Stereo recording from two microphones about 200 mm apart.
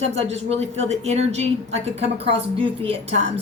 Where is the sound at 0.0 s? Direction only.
30° right (ahead or behind).